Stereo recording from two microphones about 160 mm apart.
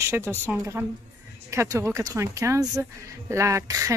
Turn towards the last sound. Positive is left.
turn(degrees=-20)  # may be behind; listen again after turning